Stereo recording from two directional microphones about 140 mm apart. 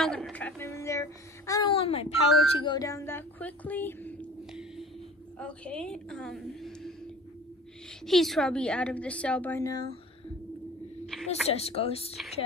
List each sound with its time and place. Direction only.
0.0 s speech: 5° left (ahead or behind); by 1.7 s 25° left (ahead or behind)
1.7 s speech: 45° left (ahead or behind)
2.7 s speech: 25° left (ahead or behind)
5.4 s a woman's voice: 5° left (ahead or behind)
8.0 s speech: centre (ahead or behind)
9.6 s speech: 25° left (ahead or behind)
11.4 s speech: 45° left (ahead or behind)